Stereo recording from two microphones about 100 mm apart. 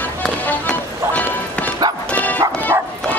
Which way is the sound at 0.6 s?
15° left (ahead or behind).